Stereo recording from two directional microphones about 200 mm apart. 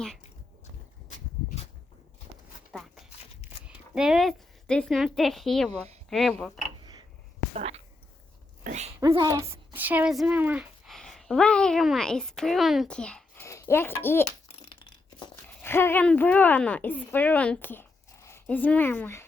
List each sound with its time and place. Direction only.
3.7 s speech: 5° right (ahead or behind)
7.5 s speech: 30° right (ahead or behind)
9.0 s speech: 20° right (ahead or behind); by 14.3 s 10° left (ahead or behind)
14.4 s a sound: 25° left (ahead or behind)
15.6 s a woman's voice: 10° left (ahead or behind)